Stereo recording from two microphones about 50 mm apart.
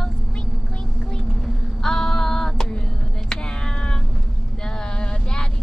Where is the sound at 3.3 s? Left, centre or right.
Centre.